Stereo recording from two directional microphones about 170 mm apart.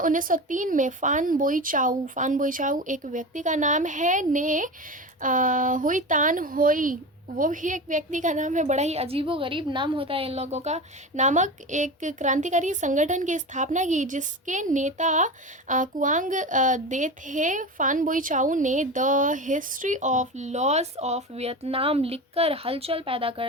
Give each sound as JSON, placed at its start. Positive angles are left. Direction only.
{"t": 0.0, "sound": "speech", "side_deg": -55}